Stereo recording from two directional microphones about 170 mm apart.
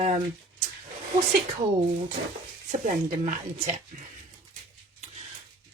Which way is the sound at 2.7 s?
50° right (ahead or behind).